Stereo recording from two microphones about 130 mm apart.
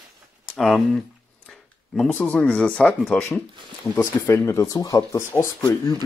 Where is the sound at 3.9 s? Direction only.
15° left (ahead or behind).